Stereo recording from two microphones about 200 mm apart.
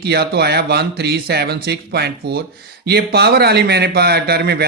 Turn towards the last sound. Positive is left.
turn(degrees=-55)  # may be behind; listen again after turning